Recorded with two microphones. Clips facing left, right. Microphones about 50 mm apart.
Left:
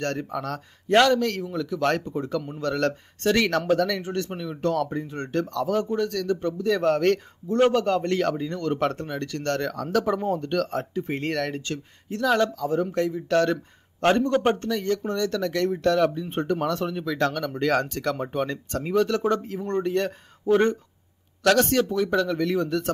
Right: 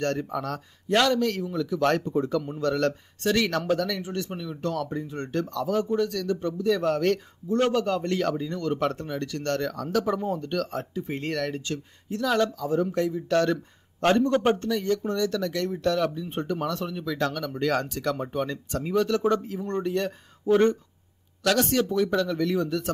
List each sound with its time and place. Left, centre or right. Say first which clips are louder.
0.2 s speech: even; left
4.3 s speech: left 2 dB; left
4.6 s speech: left 5 dB; left
14.6 s speech: even; left
21.5 s speech: left 3 dB; left